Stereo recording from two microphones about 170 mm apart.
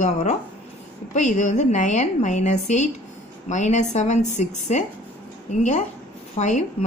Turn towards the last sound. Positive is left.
turn(degrees=45)  # may be behind; listen again after turning